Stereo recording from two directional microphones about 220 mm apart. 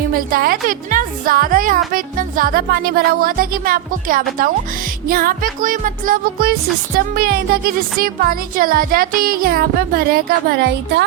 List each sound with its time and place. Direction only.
0.1 s speech: 40° right (ahead or behind)